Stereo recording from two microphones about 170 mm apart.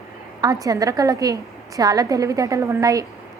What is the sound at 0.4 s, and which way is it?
A woman's voice, 20° right (ahead or behind).